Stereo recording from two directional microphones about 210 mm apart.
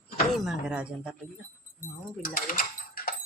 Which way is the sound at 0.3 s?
5° right (ahead or behind).